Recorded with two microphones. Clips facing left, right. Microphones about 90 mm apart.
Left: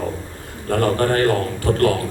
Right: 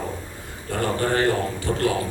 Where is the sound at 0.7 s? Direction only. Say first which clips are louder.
Left 5 dB; 55° left (ahead or behind).